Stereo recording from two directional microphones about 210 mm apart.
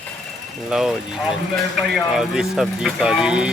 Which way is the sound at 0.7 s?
Centre (ahead or behind).